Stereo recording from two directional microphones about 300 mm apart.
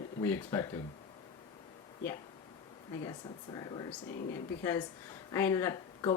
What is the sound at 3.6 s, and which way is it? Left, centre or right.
Speech, centre.